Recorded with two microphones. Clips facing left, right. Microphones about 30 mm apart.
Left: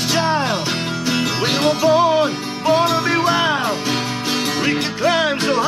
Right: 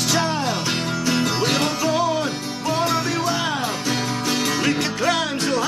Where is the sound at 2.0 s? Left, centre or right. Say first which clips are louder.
Left 6 dB; left.